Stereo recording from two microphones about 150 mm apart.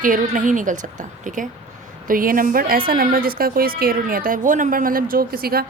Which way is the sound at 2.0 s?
70° right (ahead or behind).